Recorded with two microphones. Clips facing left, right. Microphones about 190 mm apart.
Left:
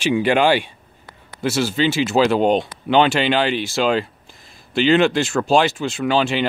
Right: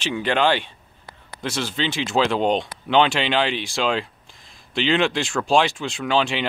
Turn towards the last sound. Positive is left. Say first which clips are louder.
# left 3 dB
turn(degrees=5)  # may be behind; listen again after turning